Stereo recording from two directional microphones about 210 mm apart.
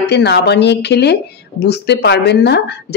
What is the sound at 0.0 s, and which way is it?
A woman's voice, 55° left (ahead or behind).